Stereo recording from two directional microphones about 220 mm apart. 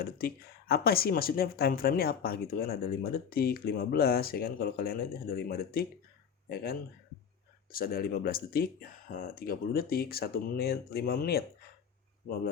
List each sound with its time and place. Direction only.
0.0 s speech: 45° left (ahead or behind)